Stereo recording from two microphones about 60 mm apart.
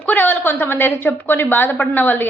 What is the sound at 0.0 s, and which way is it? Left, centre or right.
A woman's voice, left.